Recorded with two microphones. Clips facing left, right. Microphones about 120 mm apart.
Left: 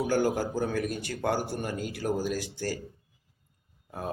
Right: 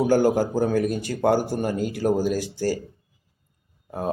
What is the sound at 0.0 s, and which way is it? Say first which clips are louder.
A man's voice: right 7 dB; 40° right (ahead or behind).